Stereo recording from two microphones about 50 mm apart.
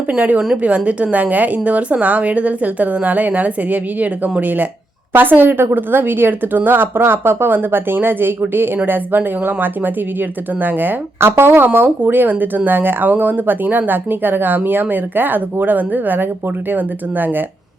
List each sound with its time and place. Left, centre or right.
0.5 s a woman's voice: right
11.2 s speech: right